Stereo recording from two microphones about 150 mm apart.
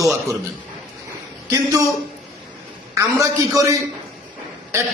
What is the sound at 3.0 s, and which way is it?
Speech, 20° right (ahead or behind).